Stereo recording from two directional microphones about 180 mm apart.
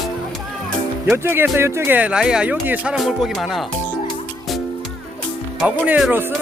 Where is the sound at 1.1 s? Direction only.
10° right (ahead or behind).